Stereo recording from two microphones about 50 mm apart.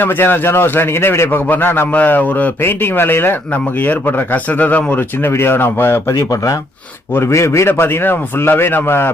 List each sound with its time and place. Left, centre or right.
0.0 s a man's voice: left
1.9 s speech: left
2.6 s a man's voice: left
4.9 s a man's voice: left
6.1 s speech: left
7.1 s speech: left
7.7 s a man's voice: left